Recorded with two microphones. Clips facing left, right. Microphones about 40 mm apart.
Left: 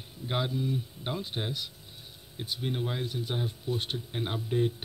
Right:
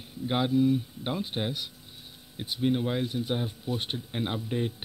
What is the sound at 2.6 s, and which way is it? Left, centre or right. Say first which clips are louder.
Speech: right 7 dB; centre.